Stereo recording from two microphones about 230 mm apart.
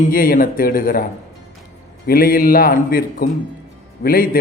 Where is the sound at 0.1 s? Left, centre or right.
Left.